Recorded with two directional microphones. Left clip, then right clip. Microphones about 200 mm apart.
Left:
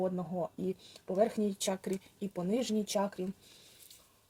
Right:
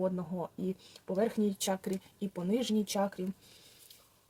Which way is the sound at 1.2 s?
15° right (ahead or behind).